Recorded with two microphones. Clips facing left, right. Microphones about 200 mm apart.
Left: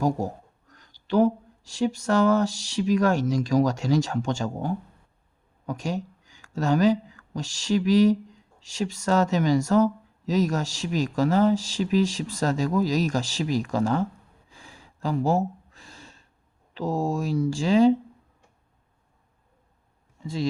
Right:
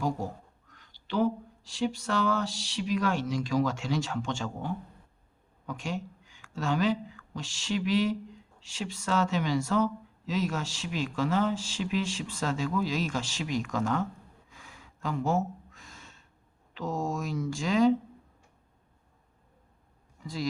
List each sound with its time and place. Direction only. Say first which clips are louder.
0.0 s speech: left 6 dB; 40° left (ahead or behind)
14.5 s gasp: left 6 dB; 30° left (ahead or behind)
16.7 s speech: left 6 dB; 35° left (ahead or behind)
20.2 s speech: left 6 dB; 25° left (ahead or behind)